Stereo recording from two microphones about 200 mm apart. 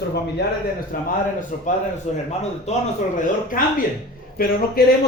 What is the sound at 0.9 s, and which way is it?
Speech, 45° left (ahead or behind).